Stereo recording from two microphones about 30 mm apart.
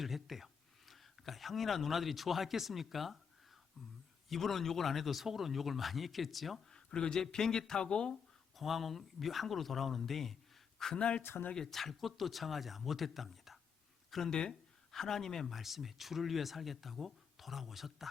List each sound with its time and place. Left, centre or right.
0.0 s speech: centre
4.3 s speech: centre
6.7 s speech: left
8.5 s speech: centre
10.9 s speech: left
11.7 s speech: centre
14.3 s speech: left
14.9 s speech: centre
15.4 s speech: centre